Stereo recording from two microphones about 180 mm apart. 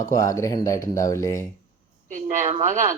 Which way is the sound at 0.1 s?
20° left (ahead or behind).